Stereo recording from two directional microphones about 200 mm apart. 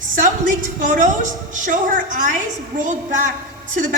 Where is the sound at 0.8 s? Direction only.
40° right (ahead or behind).